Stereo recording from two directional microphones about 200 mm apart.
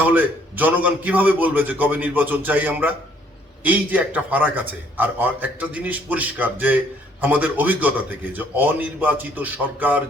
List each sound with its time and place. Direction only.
0.0 s a man's voice: 10° right (ahead or behind)